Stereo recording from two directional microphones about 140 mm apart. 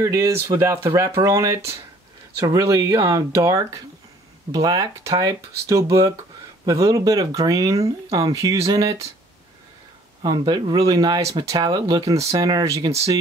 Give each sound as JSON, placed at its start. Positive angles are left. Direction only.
{"t": 0.0, "sound": "speech", "side_deg": -20}
{"t": 10.2, "sound": "speech", "side_deg": -30}